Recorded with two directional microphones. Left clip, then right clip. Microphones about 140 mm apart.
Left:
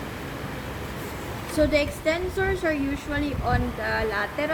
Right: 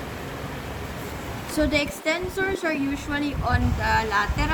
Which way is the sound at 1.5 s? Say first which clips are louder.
Left 1 dB; 55° right (ahead or behind).